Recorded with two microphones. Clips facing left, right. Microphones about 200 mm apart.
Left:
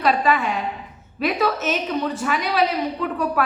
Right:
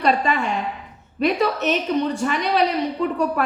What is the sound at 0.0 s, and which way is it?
A woman's voice, centre (ahead or behind).